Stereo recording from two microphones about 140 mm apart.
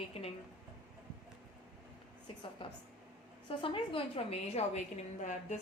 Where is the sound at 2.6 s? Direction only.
35° left (ahead or behind); by 5.3 s 55° left (ahead or behind).